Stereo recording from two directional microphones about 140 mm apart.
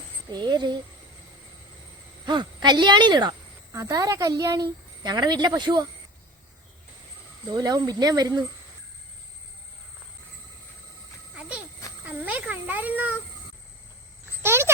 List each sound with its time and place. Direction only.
0.3 s a woman's voice: 30° right (ahead or behind)
2.2 s a woman's voice: 30° right (ahead or behind)
7.5 s speech: 30° right (ahead or behind)
11.3 s a sound: 10° right (ahead or behind)
12.0 s a child's voice: 10° right (ahead or behind)
14.4 s a sound: 15° right (ahead or behind)